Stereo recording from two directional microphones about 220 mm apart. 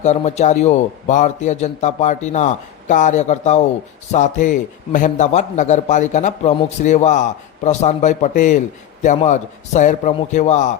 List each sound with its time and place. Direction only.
0.0 s a man's voice: 30° left (ahead or behind)